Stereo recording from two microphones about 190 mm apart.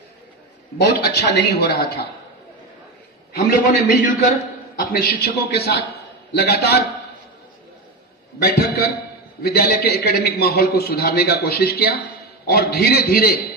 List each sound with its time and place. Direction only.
0.8 s a man's voice: 60° left (ahead or behind)
3.8 s a man's voice: 45° left (ahead or behind)
8.4 s a man's voice: 55° left (ahead or behind)